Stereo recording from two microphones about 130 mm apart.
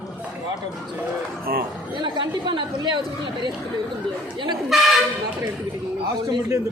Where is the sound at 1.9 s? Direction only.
35° right (ahead or behind).